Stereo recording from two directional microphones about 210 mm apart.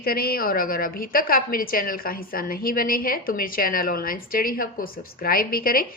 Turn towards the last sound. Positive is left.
turn(degrees=45)  # may be behind; listen again after turning